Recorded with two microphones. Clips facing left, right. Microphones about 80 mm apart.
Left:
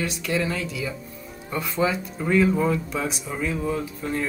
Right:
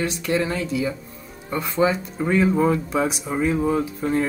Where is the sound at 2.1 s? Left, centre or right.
Right.